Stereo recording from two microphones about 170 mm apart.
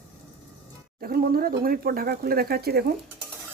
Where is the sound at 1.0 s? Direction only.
60° right (ahead or behind).